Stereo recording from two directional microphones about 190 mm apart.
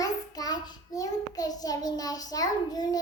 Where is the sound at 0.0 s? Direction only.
20° left (ahead or behind).